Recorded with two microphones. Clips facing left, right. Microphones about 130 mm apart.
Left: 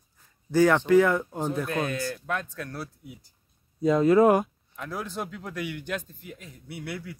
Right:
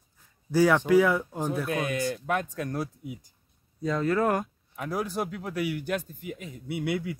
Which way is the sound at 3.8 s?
15° left (ahead or behind).